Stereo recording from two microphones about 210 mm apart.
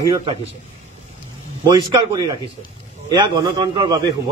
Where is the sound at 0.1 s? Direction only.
25° right (ahead or behind).